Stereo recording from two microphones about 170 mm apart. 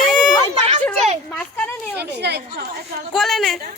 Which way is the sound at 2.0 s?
75° right (ahead or behind).